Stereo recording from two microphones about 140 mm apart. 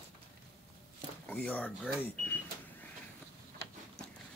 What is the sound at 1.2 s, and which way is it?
Speech, 10° left (ahead or behind).